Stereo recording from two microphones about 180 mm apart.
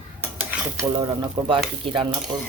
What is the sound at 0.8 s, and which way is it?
Stir, 25° right (ahead or behind).